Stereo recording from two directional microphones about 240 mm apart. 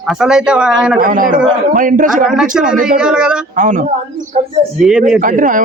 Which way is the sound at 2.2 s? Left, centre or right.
Centre.